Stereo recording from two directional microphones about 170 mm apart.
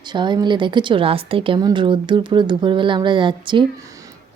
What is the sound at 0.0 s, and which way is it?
A woman's voice, 25° right (ahead or behind).